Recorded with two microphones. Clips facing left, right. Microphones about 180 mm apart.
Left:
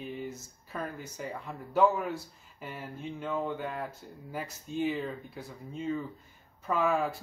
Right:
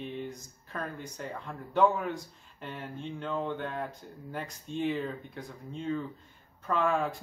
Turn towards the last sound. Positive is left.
turn(degrees=5)  # may be behind; listen again after turning